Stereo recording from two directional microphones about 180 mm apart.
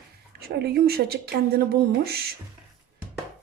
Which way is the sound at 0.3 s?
60° right (ahead or behind).